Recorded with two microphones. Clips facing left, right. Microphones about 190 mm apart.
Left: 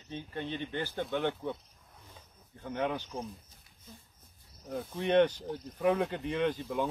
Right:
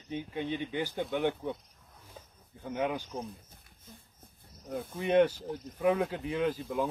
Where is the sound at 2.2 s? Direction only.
45° right (ahead or behind).